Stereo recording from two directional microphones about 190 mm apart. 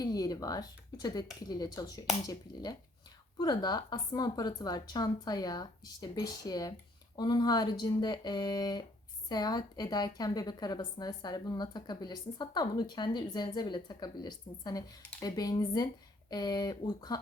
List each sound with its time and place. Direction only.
0.0 s a woman's voice: 20° left (ahead or behind)